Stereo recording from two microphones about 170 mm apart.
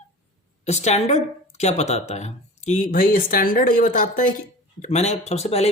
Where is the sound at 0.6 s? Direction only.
40° left (ahead or behind).